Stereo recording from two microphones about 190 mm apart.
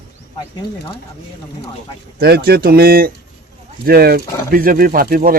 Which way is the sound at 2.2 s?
55° right (ahead or behind).